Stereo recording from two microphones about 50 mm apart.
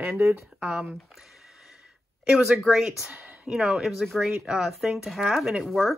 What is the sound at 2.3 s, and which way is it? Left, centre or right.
Speech, centre.